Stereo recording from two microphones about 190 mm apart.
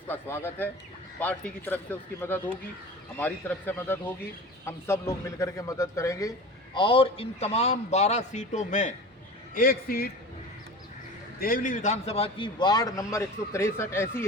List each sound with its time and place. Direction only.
0.1 s a man's voice: 10° left (ahead or behind)
6.7 s a man's voice: 25° left (ahead or behind)
9.6 s a man's voice: 50° left (ahead or behind)
11.3 s a man's voice: 50° left (ahead or behind); by 14.3 s 15° left (ahead or behind)